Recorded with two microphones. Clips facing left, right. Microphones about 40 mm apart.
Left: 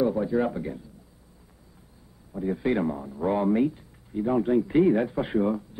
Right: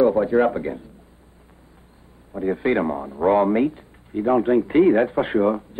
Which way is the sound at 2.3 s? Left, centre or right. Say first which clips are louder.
Right 5 dB; right.